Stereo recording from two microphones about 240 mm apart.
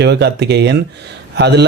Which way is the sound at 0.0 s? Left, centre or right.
Right.